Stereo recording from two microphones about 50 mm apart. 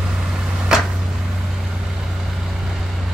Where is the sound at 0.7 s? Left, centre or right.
Centre.